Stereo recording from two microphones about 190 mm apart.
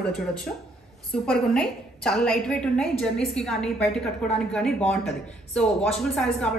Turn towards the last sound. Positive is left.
turn(degrees=5)  # may be behind; listen again after turning